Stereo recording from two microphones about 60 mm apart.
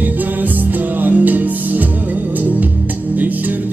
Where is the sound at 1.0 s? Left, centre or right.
Right.